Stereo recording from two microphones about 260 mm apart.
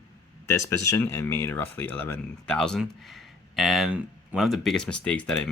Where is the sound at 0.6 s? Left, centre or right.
Right.